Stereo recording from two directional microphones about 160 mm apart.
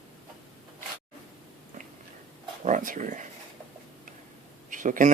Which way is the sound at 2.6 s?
55° right (ahead or behind).